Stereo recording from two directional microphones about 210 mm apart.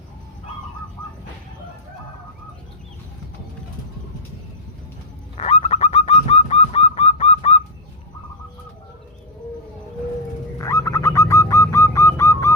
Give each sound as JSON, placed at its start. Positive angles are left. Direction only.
{"t": 5.4, "sound": "bird", "side_deg": 30}
{"t": 6.5, "sound": "goose", "side_deg": 30}
{"t": 10.6, "sound": "bird", "side_deg": 15}